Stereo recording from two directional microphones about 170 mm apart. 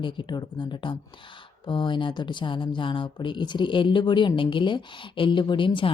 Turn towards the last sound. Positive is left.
turn(degrees=30)  # may be behind; listen again after turning